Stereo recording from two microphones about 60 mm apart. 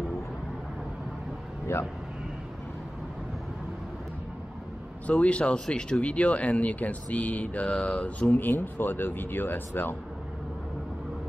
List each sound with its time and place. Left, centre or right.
5.0 s speech: left
8.4 s speech: left